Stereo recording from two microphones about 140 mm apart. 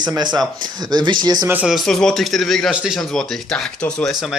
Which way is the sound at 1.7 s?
5° left (ahead or behind).